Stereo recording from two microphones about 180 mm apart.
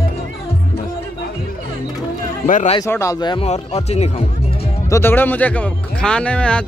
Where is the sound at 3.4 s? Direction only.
35° left (ahead or behind).